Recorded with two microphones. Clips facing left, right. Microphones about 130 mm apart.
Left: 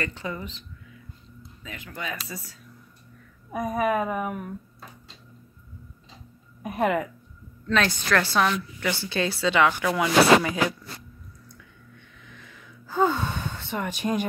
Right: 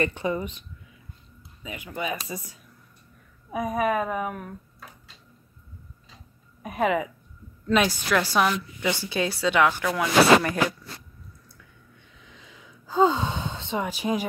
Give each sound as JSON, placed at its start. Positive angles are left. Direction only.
{"t": 0.0, "sound": "a woman's voice", "side_deg": -20}
{"t": 3.5, "sound": "speech", "side_deg": -5}
{"t": 6.6, "sound": "speech", "side_deg": 0}
{"t": 7.6, "sound": "a woman's voice", "side_deg": -10}
{"t": 12.3, "sound": "gasp", "side_deg": -15}